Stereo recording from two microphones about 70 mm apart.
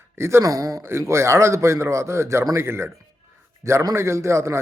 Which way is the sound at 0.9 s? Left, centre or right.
Right.